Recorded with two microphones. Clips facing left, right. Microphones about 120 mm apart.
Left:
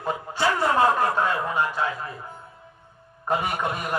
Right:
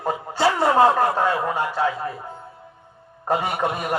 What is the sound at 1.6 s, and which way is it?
Speech, 55° right (ahead or behind).